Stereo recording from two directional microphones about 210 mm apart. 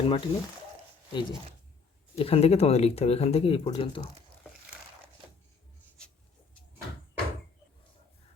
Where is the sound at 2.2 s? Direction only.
30° left (ahead or behind).